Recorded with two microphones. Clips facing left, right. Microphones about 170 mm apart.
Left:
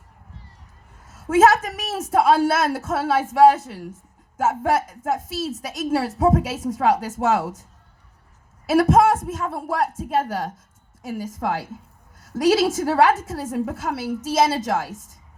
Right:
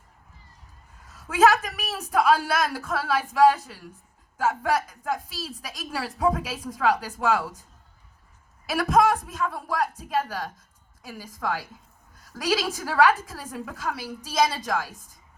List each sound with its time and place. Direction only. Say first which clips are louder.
1.1 s a woman's voice: left 4 dB; 25° left (ahead or behind)
8.7 s a woman's voice: left 5 dB; 25° left (ahead or behind)